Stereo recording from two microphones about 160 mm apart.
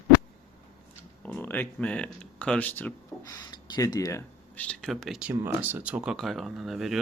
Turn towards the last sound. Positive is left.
turn(degrees=0)  # may be behind; listen again after turning